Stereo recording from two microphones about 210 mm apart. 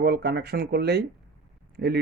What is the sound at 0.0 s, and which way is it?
Speech, 50° right (ahead or behind).